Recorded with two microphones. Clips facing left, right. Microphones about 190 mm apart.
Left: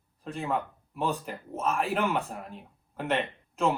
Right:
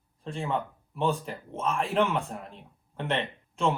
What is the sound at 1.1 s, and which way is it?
Speech, 5° left (ahead or behind).